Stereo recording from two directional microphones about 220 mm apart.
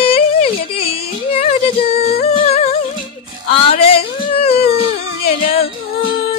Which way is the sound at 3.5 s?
25° left (ahead or behind).